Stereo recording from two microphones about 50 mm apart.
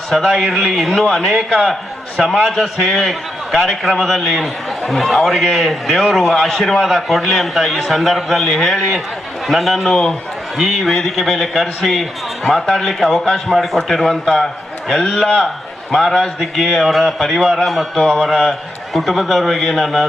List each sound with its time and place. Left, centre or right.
0.1 s a man's voice: centre
2.2 s a man's voice: centre
2.5 s a man's voice: centre